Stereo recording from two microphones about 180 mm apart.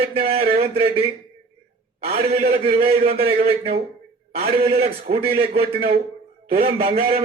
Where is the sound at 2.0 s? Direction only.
50° right (ahead or behind).